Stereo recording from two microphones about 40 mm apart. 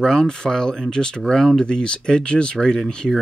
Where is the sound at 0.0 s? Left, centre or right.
Centre.